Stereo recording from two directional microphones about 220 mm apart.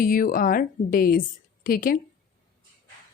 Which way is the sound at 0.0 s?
40° left (ahead or behind).